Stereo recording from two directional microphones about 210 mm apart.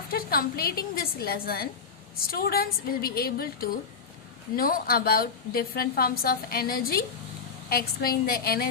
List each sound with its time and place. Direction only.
0.1 s a woman's voice: 45° left (ahead or behind)